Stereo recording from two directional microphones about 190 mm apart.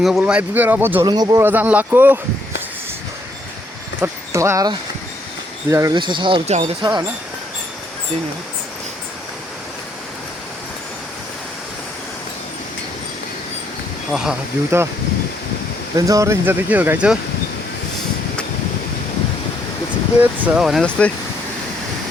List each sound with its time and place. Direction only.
0.0 s speech: centre (ahead or behind)
1.0 s speech: 20° right (ahead or behind)
4.0 s speech: 15° right (ahead or behind); by 6.7 s 35° right (ahead or behind)
6.8 s speech: 20° right (ahead or behind)
14.1 s speech: 5° right (ahead or behind)
16.0 s speech: 15° right (ahead or behind)
20.5 s speech: centre (ahead or behind)